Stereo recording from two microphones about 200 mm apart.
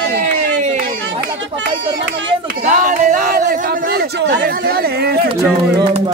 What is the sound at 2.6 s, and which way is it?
Speech, 40° right (ahead or behind).